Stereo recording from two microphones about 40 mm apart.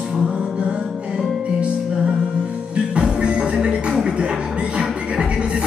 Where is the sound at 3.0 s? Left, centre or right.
Right.